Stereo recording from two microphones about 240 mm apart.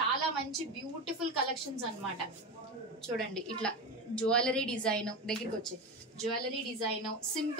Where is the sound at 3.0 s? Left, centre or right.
Centre.